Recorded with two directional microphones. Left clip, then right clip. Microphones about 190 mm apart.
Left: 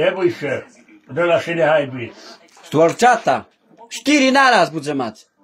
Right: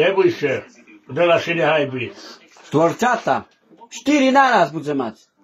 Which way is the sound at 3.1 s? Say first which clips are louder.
Left 3 dB; 40° left (ahead or behind).